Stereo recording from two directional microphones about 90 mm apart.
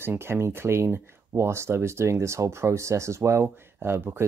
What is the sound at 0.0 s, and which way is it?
Speech, 25° right (ahead or behind).